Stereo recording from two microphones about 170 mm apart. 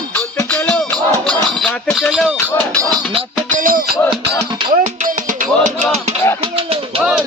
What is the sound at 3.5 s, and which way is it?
Music, 55° right (ahead or behind).